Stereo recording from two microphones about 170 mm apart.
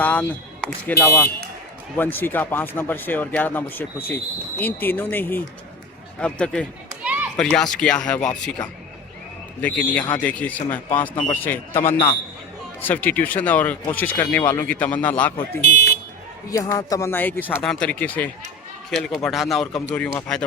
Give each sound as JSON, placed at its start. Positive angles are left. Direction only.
{"t": 0.0, "sound": "speech", "side_deg": 10}
{"t": 7.0, "sound": "children playing", "side_deg": -10}
{"t": 7.3, "sound": "speech", "side_deg": 5}
{"t": 9.6, "sound": "speech", "side_deg": 10}
{"t": 16.5, "sound": "speech", "side_deg": 20}